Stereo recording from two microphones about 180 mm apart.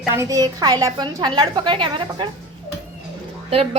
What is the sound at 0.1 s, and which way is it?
A woman's voice, 15° right (ahead or behind).